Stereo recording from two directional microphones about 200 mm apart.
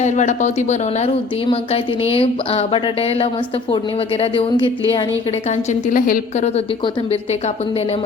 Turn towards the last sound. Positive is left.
turn(degrees=30)  # may be behind; listen again after turning